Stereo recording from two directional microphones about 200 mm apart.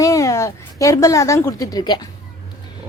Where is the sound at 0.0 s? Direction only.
15° left (ahead or behind).